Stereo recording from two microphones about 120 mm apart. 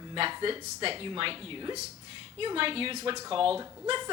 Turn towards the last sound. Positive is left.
turn(degrees=-45)  # may be behind; listen again after turning